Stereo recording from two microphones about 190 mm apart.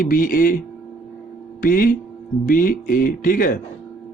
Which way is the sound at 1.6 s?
50° left (ahead or behind).